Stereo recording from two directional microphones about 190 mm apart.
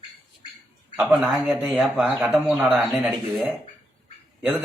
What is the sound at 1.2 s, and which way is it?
A man's voice, 5° right (ahead or behind).